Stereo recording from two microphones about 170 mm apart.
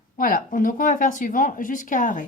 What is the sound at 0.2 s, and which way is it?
A woman's voice, 55° left (ahead or behind).